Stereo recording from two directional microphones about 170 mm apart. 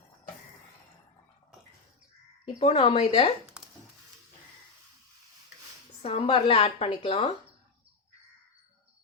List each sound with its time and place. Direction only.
2.4 s a woman's voice: 35° left (ahead or behind)
3.6 s a sound: 5° right (ahead or behind)
6.0 s a woman's voice: 35° left (ahead or behind)